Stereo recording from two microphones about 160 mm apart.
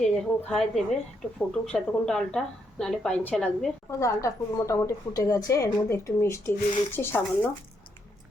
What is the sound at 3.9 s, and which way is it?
Speech, 20° left (ahead or behind).